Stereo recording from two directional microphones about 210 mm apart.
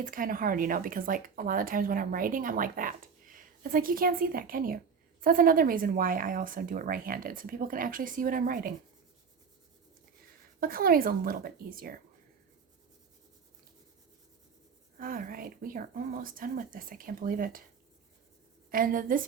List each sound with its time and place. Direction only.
0.0 s speech: 40° right (ahead or behind)
10.6 s speech: 45° right (ahead or behind)
14.9 s speech: 40° right (ahead or behind)
18.7 s speech: 40° right (ahead or behind)